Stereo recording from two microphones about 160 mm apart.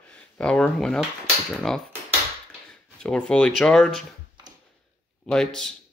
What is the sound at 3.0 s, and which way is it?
Speech, 5° left (ahead or behind).